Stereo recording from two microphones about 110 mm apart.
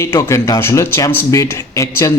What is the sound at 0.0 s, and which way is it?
A man's voice, 25° left (ahead or behind).